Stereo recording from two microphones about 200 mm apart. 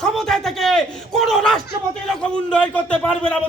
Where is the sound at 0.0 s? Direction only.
5° left (ahead or behind).